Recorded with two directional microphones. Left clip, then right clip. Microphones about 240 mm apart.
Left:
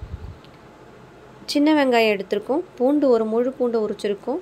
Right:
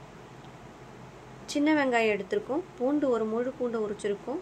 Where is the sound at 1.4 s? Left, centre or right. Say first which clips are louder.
Left 8 dB; left.